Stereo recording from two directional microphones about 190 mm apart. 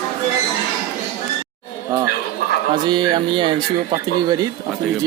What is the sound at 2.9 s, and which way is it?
Speech, 25° right (ahead or behind).